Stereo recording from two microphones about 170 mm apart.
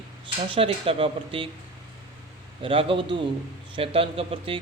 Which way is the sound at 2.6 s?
30° right (ahead or behind).